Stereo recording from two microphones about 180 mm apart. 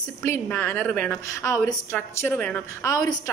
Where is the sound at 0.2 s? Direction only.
10° left (ahead or behind).